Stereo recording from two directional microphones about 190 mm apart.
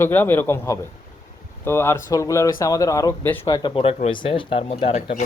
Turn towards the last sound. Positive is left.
turn(degrees=30)  # may be behind; listen again after turning